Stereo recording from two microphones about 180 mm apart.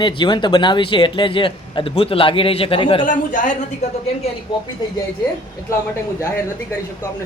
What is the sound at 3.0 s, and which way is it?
Speech, 45° left (ahead or behind).